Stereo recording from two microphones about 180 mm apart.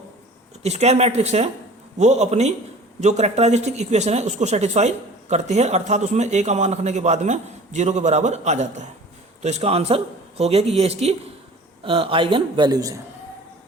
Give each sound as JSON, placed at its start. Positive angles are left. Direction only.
{"t": 0.6, "sound": "a man's voice", "side_deg": -35}